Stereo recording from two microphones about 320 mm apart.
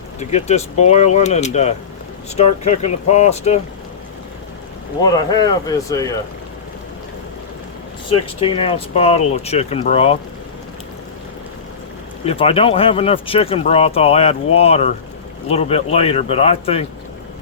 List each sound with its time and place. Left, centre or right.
0.2 s speech: left
5.3 s speech: centre
8.1 s speech: centre
12.2 s speech: centre